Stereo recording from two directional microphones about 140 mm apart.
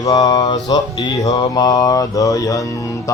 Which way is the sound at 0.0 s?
25° left (ahead or behind).